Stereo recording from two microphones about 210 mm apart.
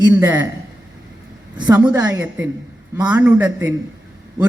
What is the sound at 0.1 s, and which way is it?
Speech, 10° right (ahead or behind).